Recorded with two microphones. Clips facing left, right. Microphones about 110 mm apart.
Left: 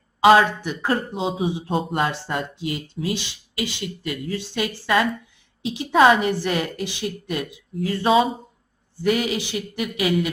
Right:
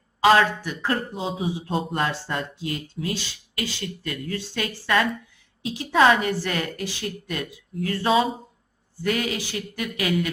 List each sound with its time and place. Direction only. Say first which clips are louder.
0.2 s speech: left 3 dB; 20° left (ahead or behind)